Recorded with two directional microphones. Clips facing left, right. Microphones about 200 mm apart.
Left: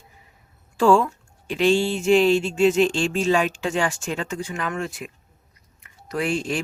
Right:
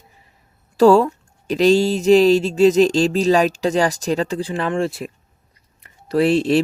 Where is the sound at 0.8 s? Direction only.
40° right (ahead or behind).